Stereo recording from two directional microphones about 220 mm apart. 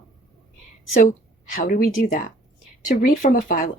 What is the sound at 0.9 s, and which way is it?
A woman's voice, 35° left (ahead or behind).